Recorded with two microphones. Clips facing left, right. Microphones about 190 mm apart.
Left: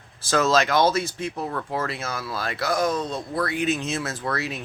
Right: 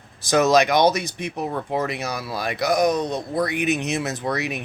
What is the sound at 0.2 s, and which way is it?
Speech, 15° right (ahead or behind).